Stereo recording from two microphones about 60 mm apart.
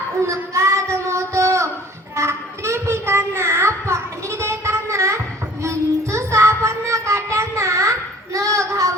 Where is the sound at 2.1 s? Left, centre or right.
Right.